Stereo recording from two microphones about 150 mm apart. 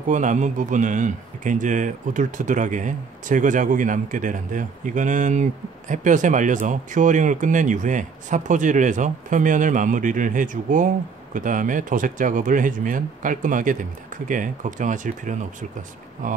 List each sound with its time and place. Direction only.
0.1 s speech: 55° right (ahead or behind)